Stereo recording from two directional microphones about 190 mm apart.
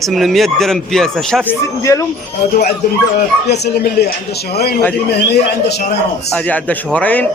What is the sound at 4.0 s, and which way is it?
Speech, 60° left (ahead or behind).